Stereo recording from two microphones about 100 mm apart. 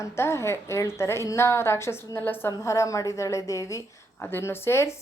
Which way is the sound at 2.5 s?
30° left (ahead or behind).